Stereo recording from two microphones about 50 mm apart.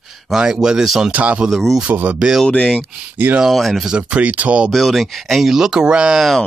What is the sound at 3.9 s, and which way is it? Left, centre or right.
Speech, right.